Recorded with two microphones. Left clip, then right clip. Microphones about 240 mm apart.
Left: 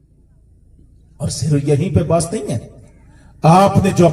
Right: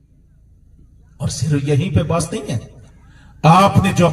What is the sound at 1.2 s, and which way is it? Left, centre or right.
A man's voice, right.